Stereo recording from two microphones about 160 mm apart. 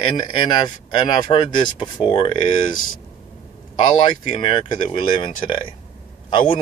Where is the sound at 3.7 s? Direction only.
30° left (ahead or behind).